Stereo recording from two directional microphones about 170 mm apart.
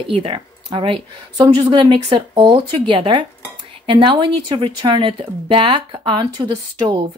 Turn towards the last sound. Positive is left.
turn(degrees=-25)  # may be behind; listen again after turning